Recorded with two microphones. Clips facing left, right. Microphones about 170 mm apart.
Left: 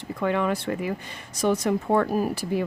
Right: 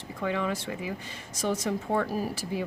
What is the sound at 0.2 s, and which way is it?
Speech, 60° left (ahead or behind).